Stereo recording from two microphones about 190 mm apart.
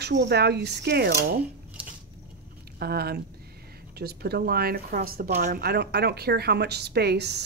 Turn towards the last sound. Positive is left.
turn(degrees=-60)  # may be behind; listen again after turning